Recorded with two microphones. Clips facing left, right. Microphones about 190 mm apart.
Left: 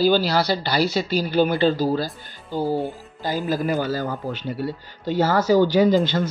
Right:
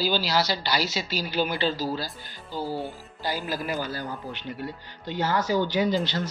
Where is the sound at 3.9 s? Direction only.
90° left.